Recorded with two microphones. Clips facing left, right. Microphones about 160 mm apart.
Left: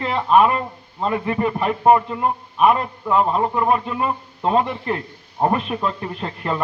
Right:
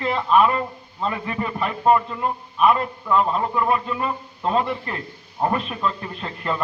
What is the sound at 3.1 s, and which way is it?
Speech, 35° left (ahead or behind).